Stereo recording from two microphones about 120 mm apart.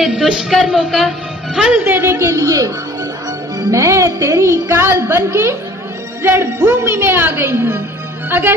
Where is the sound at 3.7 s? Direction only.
25° right (ahead or behind).